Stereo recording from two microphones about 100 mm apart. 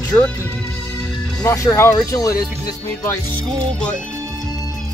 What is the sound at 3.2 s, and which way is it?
Music, 15° left (ahead or behind).